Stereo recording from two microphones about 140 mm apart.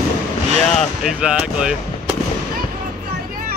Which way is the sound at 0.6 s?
5° left (ahead or behind).